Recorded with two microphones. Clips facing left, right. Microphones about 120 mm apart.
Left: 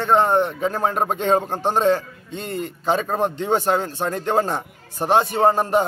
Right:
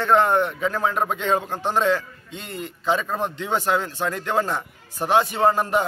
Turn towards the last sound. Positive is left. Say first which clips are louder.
# left 2 dB
turn(degrees=35)  # may be behind; listen again after turning